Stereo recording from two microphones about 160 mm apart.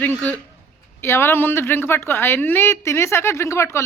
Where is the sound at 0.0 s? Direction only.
10° left (ahead or behind).